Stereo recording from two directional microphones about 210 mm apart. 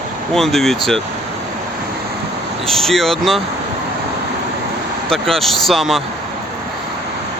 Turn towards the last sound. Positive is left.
turn(degrees=0)  # may be behind; listen again after turning